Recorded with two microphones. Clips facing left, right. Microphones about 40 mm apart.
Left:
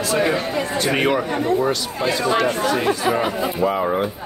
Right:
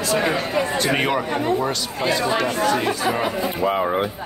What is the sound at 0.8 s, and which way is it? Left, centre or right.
Speech, centre.